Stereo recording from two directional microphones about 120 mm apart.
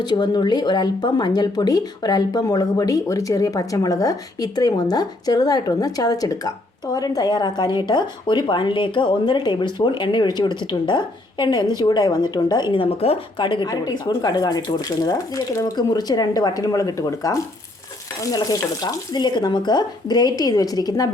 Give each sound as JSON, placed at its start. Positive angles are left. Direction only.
{"t": 0.0, "sound": "speech", "side_deg": 35}
{"t": 13.4, "sound": "speech", "side_deg": 40}